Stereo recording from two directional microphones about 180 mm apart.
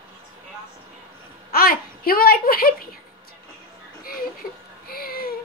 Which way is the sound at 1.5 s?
55° left (ahead or behind).